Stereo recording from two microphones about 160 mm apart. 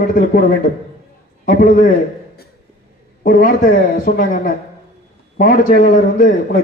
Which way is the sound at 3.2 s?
60° left (ahead or behind).